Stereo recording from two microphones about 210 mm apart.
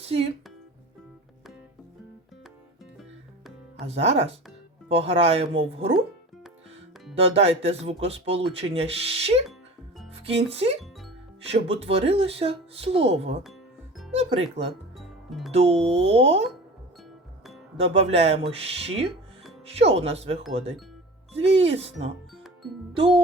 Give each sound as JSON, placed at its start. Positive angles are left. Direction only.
{"t": 3.8, "sound": "speech", "side_deg": -30}
{"t": 7.2, "sound": "speech", "side_deg": -30}
{"t": 14.9, "sound": "music", "side_deg": 0}
{"t": 15.5, "sound": "speech", "side_deg": -30}
{"t": 17.7, "sound": "speech", "side_deg": -30}
{"t": 21.4, "sound": "speech", "side_deg": -30}